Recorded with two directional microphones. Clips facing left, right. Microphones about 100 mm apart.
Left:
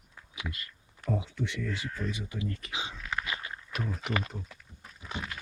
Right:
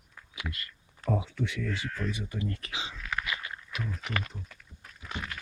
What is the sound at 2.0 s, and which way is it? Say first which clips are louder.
Speech: right 1 dB; 75° right (ahead or behind).